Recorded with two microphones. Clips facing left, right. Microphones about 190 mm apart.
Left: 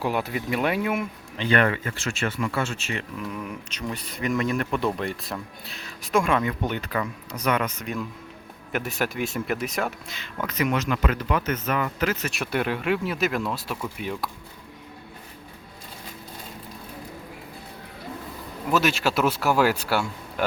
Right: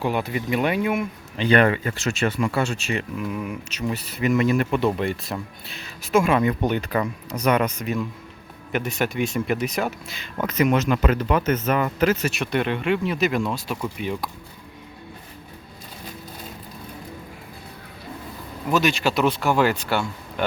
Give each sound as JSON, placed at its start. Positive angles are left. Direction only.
{"t": 0.0, "sound": "speech", "side_deg": 0}
{"t": 1.4, "sound": "speech", "side_deg": -20}
{"t": 6.4, "sound": "speech", "side_deg": -20}
{"t": 6.9, "sound": "speech", "side_deg": -35}
{"t": 7.3, "sound": "speech", "side_deg": -20}
{"t": 7.9, "sound": "speech", "side_deg": -5}
{"t": 10.2, "sound": "speech", "side_deg": -20}
{"t": 12.3, "sound": "speech", "side_deg": 5}
{"t": 18.7, "sound": "speech", "side_deg": 5}